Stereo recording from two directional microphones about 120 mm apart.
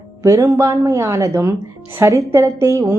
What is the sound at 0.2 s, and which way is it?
Speech, 25° right (ahead or behind).